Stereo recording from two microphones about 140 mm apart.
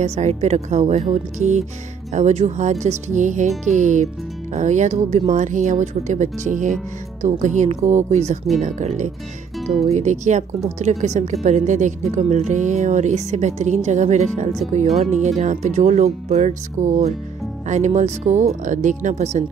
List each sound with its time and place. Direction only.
0.0 s speech: 50° right (ahead or behind)